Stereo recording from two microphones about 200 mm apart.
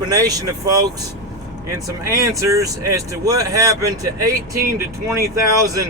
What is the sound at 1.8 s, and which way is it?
Speech, 15° right (ahead or behind).